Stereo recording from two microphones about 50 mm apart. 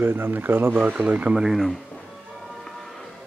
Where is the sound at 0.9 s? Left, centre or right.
Right.